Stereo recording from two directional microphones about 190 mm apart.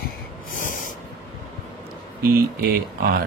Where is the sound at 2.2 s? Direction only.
55° right (ahead or behind).